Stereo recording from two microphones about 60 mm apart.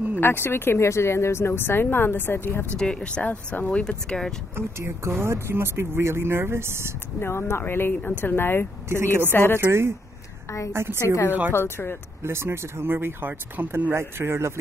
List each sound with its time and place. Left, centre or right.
0.2 s speech: left
2.8 s speech: centre; by 3.7 s left
3.7 s speech: centre
4.6 s speech: right
7.2 s speech: left
8.8 s speech: right
9.3 s speech: left
9.6 s speech: right
11.0 s a woman's voice: left
11.5 s speech: left
12.2 s speech: right